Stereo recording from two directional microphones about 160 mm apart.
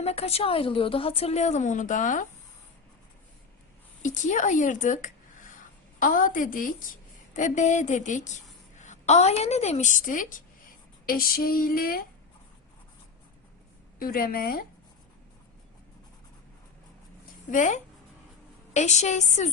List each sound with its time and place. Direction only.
0.0 s a woman's voice: 40° left (ahead or behind)
4.0 s a woman's voice: 50° left (ahead or behind)
6.0 s a sound: 55° left (ahead or behind)
7.3 s a woman's voice: 50° left (ahead or behind)
11.0 s a sound: 65° left (ahead or behind)
14.0 s a woman's voice: 65° left (ahead or behind)
17.5 s a woman's voice: 50° left (ahead or behind)